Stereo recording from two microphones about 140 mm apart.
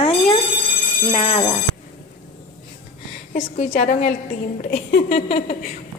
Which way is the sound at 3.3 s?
55° left (ahead or behind).